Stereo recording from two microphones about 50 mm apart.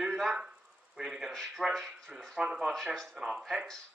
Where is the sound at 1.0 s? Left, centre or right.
Centre.